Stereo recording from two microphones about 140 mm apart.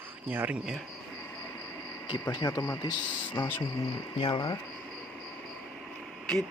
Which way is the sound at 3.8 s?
35° left (ahead or behind).